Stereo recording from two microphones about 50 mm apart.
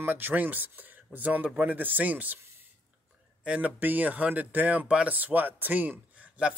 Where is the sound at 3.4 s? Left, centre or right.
Right.